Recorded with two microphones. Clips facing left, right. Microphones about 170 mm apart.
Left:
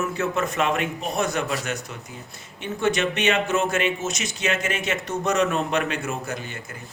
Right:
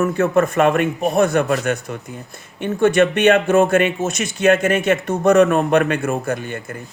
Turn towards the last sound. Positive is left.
turn(degrees=-55)  # may be behind; listen again after turning